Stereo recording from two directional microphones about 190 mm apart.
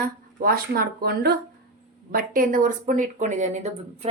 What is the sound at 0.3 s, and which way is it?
Speech, 50° right (ahead or behind).